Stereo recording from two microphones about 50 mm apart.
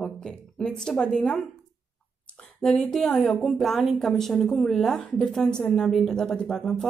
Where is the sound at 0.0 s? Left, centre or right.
Centre.